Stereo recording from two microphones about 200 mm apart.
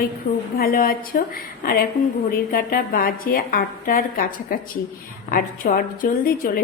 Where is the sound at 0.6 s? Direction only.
45° left (ahead or behind).